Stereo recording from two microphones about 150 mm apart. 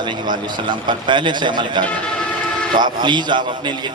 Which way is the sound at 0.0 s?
30° right (ahead or behind).